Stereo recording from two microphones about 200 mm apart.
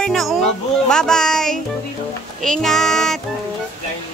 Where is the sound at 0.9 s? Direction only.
5° left (ahead or behind).